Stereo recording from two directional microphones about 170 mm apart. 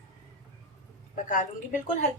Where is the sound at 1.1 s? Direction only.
50° left (ahead or behind).